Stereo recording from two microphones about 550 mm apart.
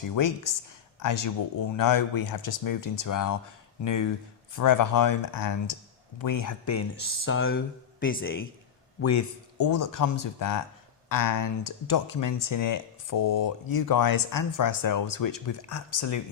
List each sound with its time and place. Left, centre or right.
0.2 s speech: left
4.5 s speech: left; by 8.4 s centre
9.0 s speech: left